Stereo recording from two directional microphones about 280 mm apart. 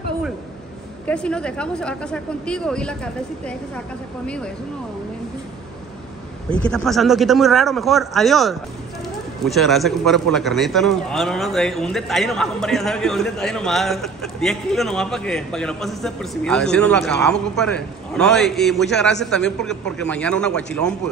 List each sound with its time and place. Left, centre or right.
1.0 s a man's voice: centre
6.5 s a man's voice: centre